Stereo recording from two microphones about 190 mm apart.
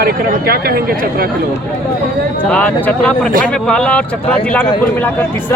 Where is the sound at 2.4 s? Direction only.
10° left (ahead or behind).